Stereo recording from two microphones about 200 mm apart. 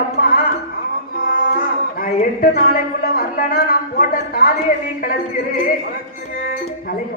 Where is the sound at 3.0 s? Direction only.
50° left (ahead or behind).